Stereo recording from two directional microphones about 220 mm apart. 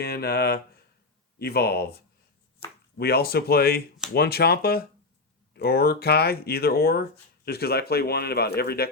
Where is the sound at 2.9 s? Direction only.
45° left (ahead or behind).